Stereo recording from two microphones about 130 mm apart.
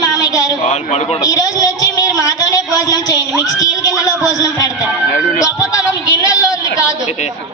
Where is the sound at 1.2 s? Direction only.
30° left (ahead or behind).